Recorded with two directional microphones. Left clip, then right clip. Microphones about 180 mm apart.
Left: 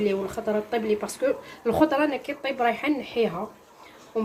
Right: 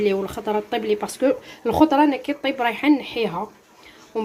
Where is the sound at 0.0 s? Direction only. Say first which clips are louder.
Right 4 dB; 60° right (ahead or behind).